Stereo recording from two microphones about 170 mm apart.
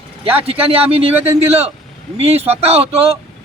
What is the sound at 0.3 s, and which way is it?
Speech, 35° right (ahead or behind).